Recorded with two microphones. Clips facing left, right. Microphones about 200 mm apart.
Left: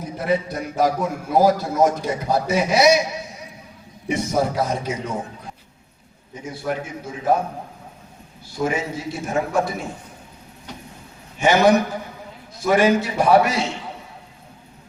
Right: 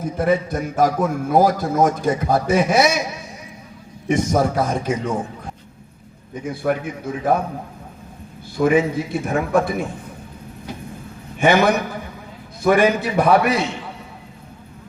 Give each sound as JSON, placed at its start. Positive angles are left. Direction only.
{"t": 0.0, "sound": "a man's voice", "side_deg": -50}
{"t": 4.1, "sound": "a man's voice", "side_deg": -50}
{"t": 6.4, "sound": "a man's voice", "side_deg": -55}
{"t": 8.5, "sound": "a man's voice", "side_deg": -55}
{"t": 11.3, "sound": "a man's voice", "side_deg": -55}